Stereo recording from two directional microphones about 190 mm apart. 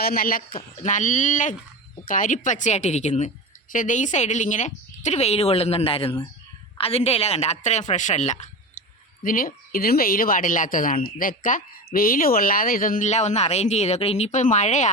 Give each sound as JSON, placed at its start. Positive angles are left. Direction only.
{"t": 0.0, "sound": "a woman's voice", "side_deg": 50}